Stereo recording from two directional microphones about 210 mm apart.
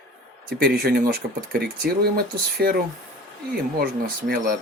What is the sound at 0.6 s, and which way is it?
Speech, 50° right (ahead or behind).